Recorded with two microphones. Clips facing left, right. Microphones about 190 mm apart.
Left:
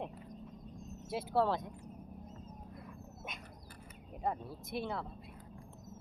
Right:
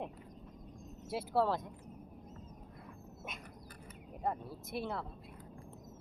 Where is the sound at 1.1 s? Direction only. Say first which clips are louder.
Even; 5° right (ahead or behind).